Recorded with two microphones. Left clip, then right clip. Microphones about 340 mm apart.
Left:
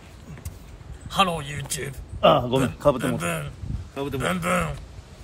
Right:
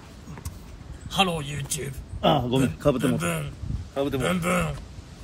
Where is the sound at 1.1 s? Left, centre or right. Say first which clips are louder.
Left 2 dB; centre.